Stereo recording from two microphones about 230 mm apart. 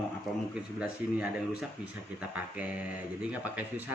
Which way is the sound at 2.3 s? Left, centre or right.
Centre.